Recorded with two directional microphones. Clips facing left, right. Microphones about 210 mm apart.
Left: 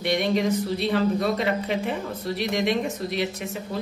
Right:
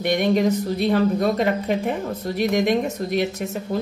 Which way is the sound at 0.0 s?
45° right (ahead or behind).